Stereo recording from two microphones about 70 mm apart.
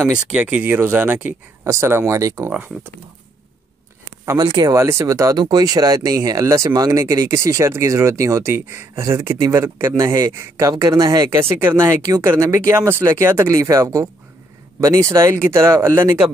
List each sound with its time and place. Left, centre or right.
0.1 s speech: centre
1.6 s speech: right
4.6 s speech: right
5.4 s speech: right
6.4 s speech: right
6.7 s speech: right
9.9 s speech: right
10.7 s speech: right
12.4 s speech: right